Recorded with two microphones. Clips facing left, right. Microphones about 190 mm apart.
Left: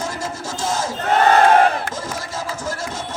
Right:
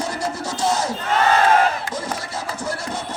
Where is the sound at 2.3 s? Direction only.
90° left.